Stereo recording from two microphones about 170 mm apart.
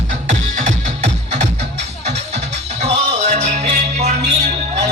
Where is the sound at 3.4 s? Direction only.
40° right (ahead or behind).